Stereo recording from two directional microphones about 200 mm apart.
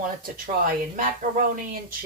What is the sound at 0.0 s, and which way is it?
Speech, 45° right (ahead or behind).